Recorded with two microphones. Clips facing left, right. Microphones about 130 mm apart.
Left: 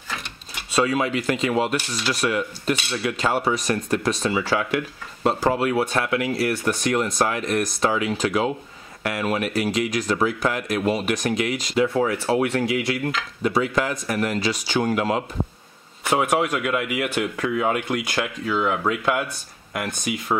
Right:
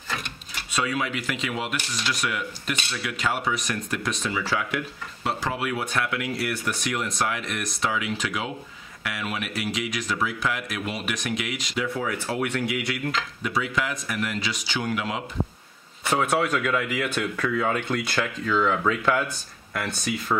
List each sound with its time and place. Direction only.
0.7 s speech: 30° left (ahead or behind)
5.2 s speech: 40° left (ahead or behind)
16.1 s speech: 15° left (ahead or behind)